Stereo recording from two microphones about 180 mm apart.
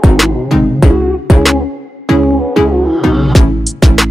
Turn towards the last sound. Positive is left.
turn(degrees=0)  # may be behind; listen again after turning